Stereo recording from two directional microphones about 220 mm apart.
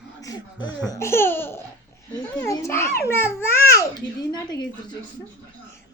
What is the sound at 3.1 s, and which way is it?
Babbling, 10° left (ahead or behind).